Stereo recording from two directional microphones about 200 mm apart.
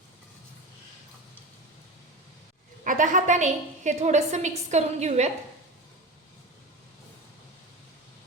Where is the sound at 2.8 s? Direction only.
40° right (ahead or behind).